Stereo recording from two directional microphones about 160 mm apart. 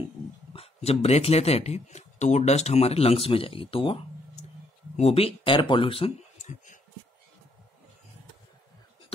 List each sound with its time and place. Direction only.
0.5 s speech: 40° left (ahead or behind)